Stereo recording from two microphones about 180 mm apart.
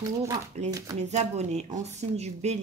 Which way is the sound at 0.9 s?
40° right (ahead or behind).